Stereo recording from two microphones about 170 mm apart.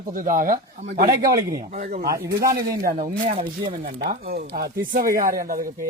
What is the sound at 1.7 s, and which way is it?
Speech, 45° right (ahead or behind).